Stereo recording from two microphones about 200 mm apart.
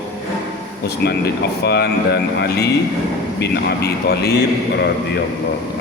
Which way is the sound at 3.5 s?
55° left (ahead or behind).